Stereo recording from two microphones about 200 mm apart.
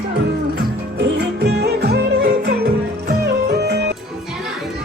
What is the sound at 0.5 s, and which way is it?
Music, 60° right (ahead or behind).